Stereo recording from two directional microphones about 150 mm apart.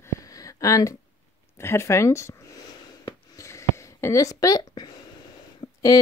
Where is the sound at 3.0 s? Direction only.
20° left (ahead or behind).